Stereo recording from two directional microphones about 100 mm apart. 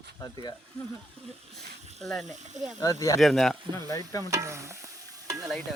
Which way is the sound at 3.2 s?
5° left (ahead or behind).